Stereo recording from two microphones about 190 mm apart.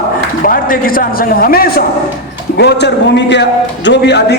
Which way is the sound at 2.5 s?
60° left (ahead or behind).